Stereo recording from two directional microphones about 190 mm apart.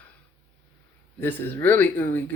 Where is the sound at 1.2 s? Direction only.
10° left (ahead or behind).